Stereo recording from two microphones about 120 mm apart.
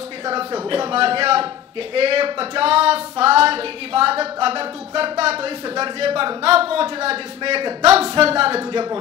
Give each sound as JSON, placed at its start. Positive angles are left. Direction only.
{"t": 0.2, "sound": "speech", "side_deg": -35}